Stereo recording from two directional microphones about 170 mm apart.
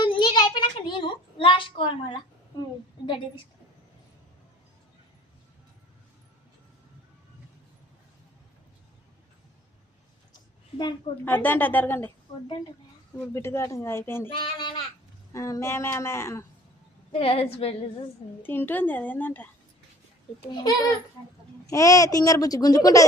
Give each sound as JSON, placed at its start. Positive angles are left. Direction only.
{"t": 0.0, "sound": "a sound", "side_deg": 25}
{"t": 10.3, "sound": "a sound", "side_deg": 25}
{"t": 11.3, "sound": "speech", "side_deg": 10}
{"t": 13.1, "sound": "speech", "side_deg": 15}
{"t": 14.3, "sound": "a child's voice", "side_deg": 25}
{"t": 17.1, "sound": "a woman's voice", "side_deg": 35}
{"t": 18.4, "sound": "speech", "side_deg": 10}
{"t": 20.5, "sound": "a child's voice", "side_deg": 25}